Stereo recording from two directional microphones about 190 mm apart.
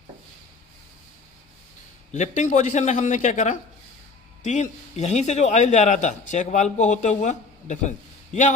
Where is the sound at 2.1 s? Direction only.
40° left (ahead or behind).